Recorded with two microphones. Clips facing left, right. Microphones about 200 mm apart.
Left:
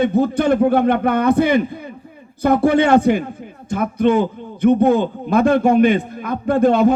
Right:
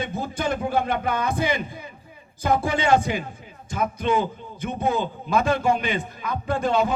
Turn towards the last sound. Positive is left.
turn(degrees=55)  # may be behind; listen again after turning